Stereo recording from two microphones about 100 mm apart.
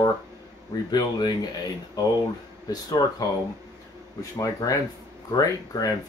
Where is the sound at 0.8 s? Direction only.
45° left (ahead or behind).